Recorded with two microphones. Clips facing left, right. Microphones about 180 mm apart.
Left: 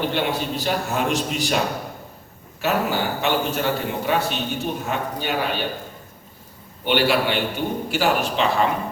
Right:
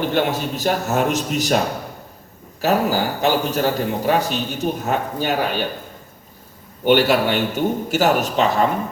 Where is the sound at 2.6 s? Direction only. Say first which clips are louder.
Right 4 dB; 40° right (ahead or behind).